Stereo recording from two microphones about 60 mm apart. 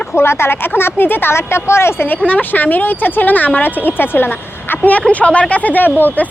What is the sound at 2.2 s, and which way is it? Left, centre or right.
Speech, left.